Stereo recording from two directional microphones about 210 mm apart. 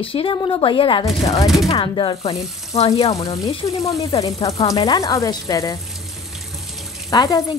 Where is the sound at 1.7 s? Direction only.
25° left (ahead or behind).